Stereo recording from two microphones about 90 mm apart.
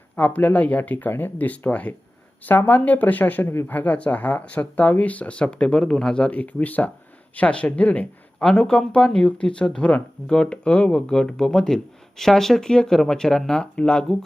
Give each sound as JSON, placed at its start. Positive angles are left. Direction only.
{"t": 0.2, "sound": "speech", "side_deg": 15}
{"t": 3.7, "sound": "speech", "side_deg": 15}